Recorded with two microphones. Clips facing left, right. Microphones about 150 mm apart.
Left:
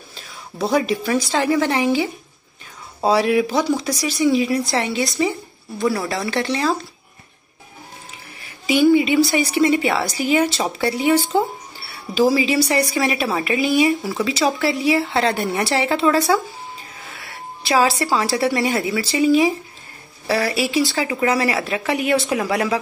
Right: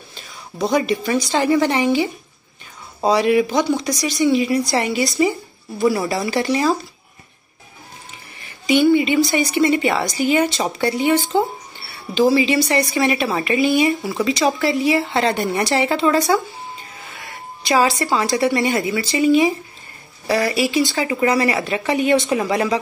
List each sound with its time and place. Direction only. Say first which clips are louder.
0.1 s a woman's voice: even; centre (ahead or behind)
8.4 s a woman's voice: right 1 dB; 5° left (ahead or behind)